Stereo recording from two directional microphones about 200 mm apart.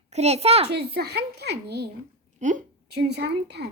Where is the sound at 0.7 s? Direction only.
55° right (ahead or behind).